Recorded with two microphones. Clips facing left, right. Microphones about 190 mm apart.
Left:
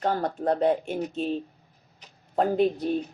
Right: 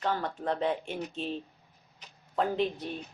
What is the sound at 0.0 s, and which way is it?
Speech, 40° left (ahead or behind).